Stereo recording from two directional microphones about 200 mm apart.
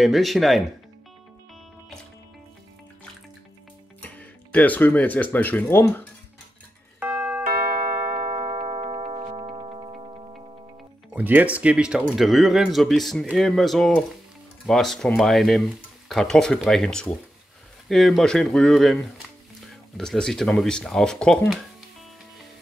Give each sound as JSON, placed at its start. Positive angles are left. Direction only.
{"t": 0.0, "sound": "speech", "side_deg": 0}
{"t": 4.0, "sound": "speech", "side_deg": 5}
{"t": 7.0, "sound": "music", "side_deg": -10}
{"t": 8.4, "sound": "music", "side_deg": -25}
{"t": 11.1, "sound": "speech", "side_deg": -10}